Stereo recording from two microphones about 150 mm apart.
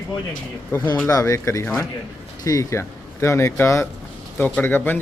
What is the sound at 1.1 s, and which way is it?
A man's voice, 20° left (ahead or behind).